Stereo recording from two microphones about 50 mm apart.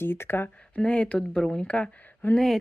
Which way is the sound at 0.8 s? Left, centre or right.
Left.